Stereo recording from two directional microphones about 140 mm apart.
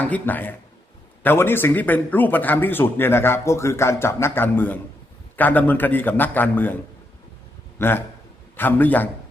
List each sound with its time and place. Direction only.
0.0 s a man's voice: 15° left (ahead or behind)
7.8 s a man's voice: 15° left (ahead or behind)